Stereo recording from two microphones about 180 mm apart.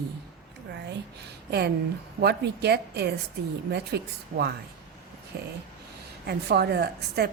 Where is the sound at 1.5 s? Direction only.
65° right (ahead or behind).